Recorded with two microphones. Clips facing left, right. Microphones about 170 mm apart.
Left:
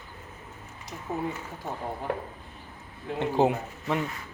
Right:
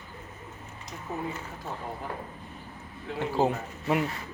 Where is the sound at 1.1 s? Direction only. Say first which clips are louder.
Left 3 dB; 25° left (ahead or behind).